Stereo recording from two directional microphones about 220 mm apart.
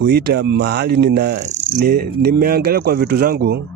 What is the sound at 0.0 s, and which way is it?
Speech, 45° right (ahead or behind).